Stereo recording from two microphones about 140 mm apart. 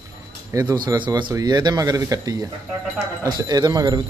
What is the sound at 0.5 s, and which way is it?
Speech, 25° right (ahead or behind).